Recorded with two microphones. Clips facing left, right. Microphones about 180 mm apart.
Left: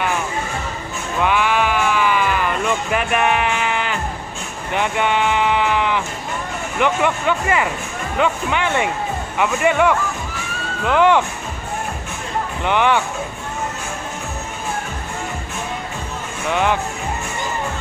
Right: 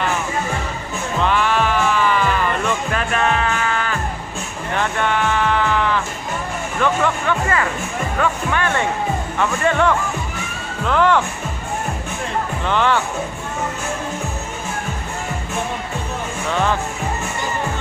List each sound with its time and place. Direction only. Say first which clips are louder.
1.2 s sheep: left 1 dB; 10° left (ahead or behind)
6.8 s speech: left 1 dB; 15° left (ahead or behind)
12.6 s speech: left 2 dB; 15° left (ahead or behind)
16.4 s speech: left 1 dB; 15° left (ahead or behind)